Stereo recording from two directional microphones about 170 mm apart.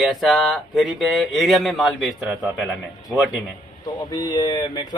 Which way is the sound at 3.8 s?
20° left (ahead or behind).